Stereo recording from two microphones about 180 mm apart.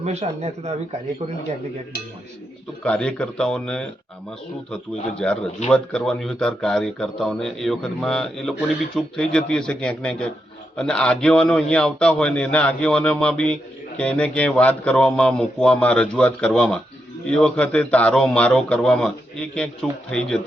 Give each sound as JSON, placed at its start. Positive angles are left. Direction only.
{"t": 0.0, "sound": "speech", "side_deg": -40}
{"t": 2.8, "sound": "a man's voice", "side_deg": 5}
{"t": 5.2, "sound": "a man's voice", "side_deg": 5}